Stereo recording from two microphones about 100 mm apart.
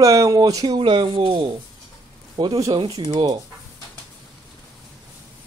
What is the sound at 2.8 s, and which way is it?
Speech, 40° right (ahead or behind).